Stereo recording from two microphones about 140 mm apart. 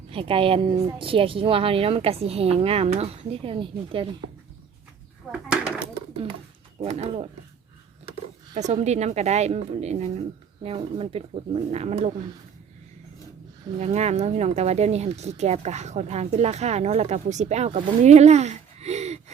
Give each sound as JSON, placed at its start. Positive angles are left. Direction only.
{"t": 0.1, "sound": "a woman's voice", "side_deg": -40}
{"t": 5.3, "sound": "a sound", "side_deg": -5}
{"t": 6.7, "sound": "speech", "side_deg": -45}
{"t": 8.5, "sound": "speech", "side_deg": -55}
{"t": 13.7, "sound": "speech", "side_deg": -50}